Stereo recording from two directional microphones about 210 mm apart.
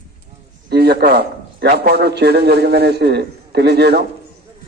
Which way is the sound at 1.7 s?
50° right (ahead or behind).